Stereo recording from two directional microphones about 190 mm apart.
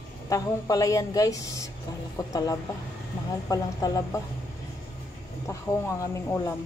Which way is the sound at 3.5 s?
20° left (ahead or behind).